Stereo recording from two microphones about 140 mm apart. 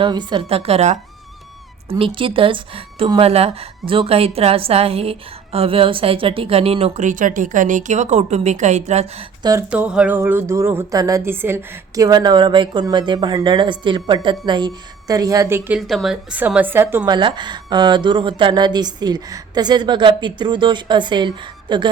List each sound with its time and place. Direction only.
0.0 s a woman's voice: 35° right (ahead or behind); by 9.2 s 50° right (ahead or behind)
9.4 s a sound: 25° right (ahead or behind)
9.6 s speech: 10° right (ahead or behind)
12.0 s speech: 30° right (ahead or behind)
15.9 s a woman's voice: centre (ahead or behind)
16.3 s speech: 10° right (ahead or behind)
17.1 s speech: 35° right (ahead or behind)